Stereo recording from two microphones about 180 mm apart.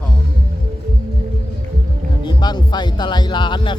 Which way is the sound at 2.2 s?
25° left (ahead or behind).